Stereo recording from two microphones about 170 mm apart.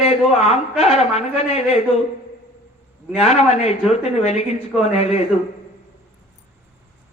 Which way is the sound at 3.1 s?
40° left (ahead or behind).